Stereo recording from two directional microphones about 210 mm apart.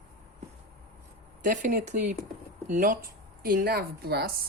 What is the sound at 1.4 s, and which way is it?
A woman's voice, 40° right (ahead or behind).